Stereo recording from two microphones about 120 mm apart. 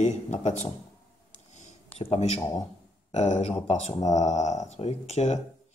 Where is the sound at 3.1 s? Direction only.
75° left (ahead or behind); by 4.1 s 55° left (ahead or behind).